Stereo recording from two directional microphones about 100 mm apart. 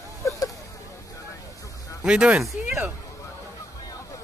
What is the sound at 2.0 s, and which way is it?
Speech, 10° right (ahead or behind).